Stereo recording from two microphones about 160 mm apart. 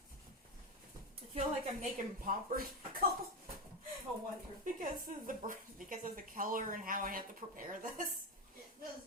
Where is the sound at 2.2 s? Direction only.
65° right (ahead or behind).